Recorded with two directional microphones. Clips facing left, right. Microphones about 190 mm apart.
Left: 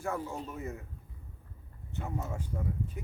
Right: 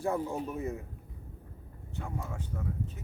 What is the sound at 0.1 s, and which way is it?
Speech, 15° right (ahead or behind).